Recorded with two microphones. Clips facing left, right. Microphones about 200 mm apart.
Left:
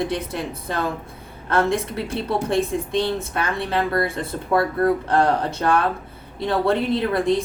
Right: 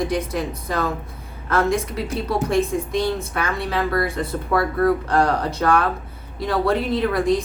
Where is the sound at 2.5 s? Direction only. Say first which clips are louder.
Right 1 dB; 25° left (ahead or behind).